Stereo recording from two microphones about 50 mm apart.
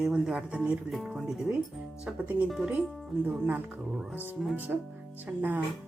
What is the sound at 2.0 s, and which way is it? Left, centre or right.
Speech, right.